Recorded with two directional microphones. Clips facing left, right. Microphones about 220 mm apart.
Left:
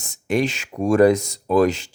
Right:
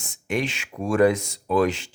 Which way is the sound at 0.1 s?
40° left (ahead or behind).